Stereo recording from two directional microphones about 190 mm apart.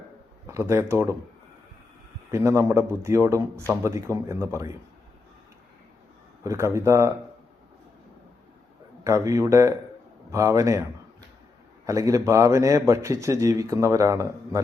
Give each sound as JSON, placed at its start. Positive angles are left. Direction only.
{"t": 0.4, "sound": "speech", "side_deg": -15}
{"t": 2.3, "sound": "a man's voice", "side_deg": -15}
{"t": 6.4, "sound": "a man's voice", "side_deg": -15}
{"t": 9.0, "sound": "a man's voice", "side_deg": -15}
{"t": 11.9, "sound": "a man's voice", "side_deg": -15}